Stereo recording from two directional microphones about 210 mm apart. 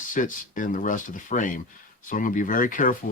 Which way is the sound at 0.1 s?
40° left (ahead or behind).